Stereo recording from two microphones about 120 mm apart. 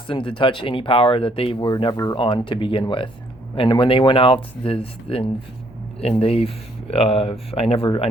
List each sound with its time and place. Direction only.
0.1 s speech: 45° left (ahead or behind)
1.5 s speech: 35° left (ahead or behind)
2.1 s speech: 45° left (ahead or behind)